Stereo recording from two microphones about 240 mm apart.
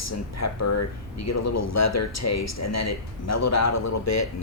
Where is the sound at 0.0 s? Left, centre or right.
Left.